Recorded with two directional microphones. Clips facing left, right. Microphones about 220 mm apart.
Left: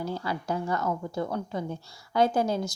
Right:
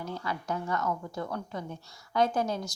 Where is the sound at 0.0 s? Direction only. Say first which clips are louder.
Left 4 dB; 30° left (ahead or behind).